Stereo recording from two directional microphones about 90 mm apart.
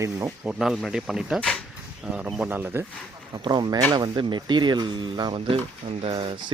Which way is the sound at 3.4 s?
55° right (ahead or behind).